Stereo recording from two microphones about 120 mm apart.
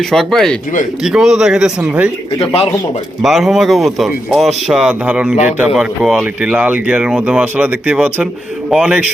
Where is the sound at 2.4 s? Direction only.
55° left (ahead or behind).